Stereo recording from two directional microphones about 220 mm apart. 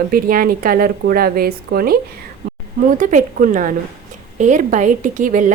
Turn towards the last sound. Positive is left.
turn(degrees=-35)  # may be behind; listen again after turning